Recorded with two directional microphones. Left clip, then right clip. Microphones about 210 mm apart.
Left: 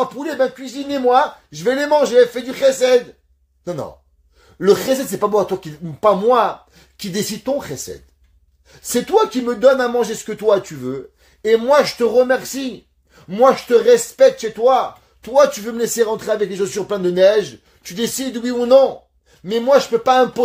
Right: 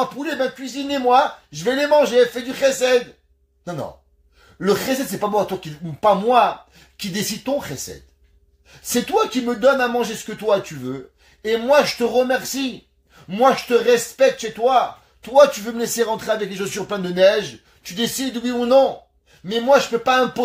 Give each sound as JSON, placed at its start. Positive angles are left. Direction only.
{"t": 0.0, "sound": "speech", "side_deg": 40}
{"t": 1.6, "sound": "speech", "side_deg": 45}
{"t": 4.6, "sound": "speech", "side_deg": 45}
{"t": 9.1, "sound": "speech", "side_deg": 45}